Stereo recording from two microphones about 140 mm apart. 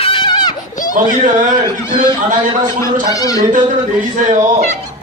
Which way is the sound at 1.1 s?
65° right (ahead or behind).